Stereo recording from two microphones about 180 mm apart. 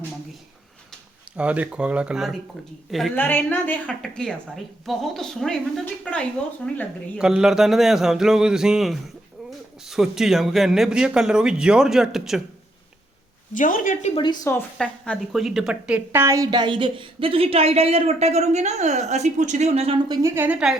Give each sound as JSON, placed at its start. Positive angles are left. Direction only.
{"t": 1.4, "sound": "speech", "side_deg": -5}
{"t": 3.2, "sound": "a woman's voice", "side_deg": 10}
{"t": 13.5, "sound": "speech", "side_deg": 50}
{"t": 14.2, "sound": "speech", "side_deg": 25}
{"t": 14.5, "sound": "a woman's voice", "side_deg": 5}
{"t": 20.1, "sound": "speech", "side_deg": -15}